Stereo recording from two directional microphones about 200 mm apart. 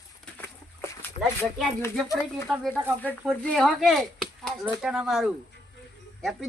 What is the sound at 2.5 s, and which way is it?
Speech, 5° right (ahead or behind).